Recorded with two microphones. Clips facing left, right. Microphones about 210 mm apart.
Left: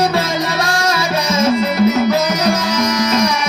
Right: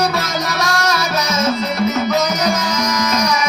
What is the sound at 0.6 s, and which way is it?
Music, 30° left (ahead or behind).